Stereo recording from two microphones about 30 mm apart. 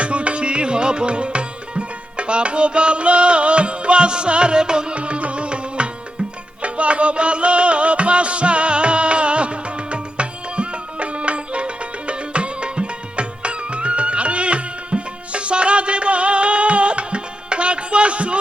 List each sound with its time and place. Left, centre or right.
0.0 s music: right
4.9 s music: right